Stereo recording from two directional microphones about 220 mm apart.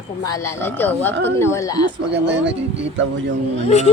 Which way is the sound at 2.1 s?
55° right (ahead or behind).